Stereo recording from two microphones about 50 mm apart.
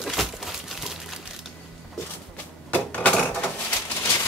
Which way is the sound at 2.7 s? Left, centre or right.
Left.